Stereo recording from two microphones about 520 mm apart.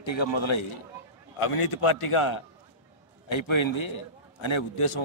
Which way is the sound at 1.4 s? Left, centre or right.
Left.